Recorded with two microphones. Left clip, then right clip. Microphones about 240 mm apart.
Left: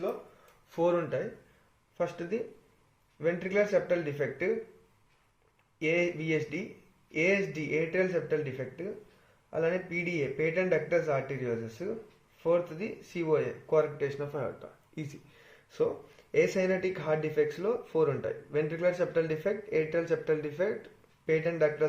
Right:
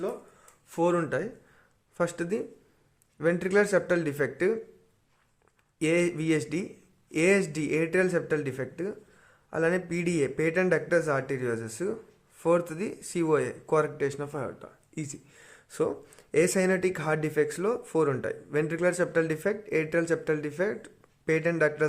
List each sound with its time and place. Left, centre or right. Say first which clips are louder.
0.7 s speech: right 2 dB; right
5.8 s speech: right 3 dB; right